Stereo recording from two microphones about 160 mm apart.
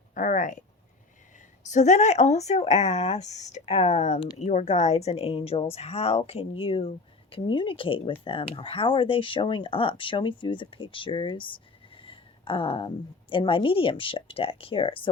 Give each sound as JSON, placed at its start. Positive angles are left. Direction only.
{"t": 0.1, "sound": "speech", "side_deg": 55}
{"t": 1.7, "sound": "speech", "side_deg": 45}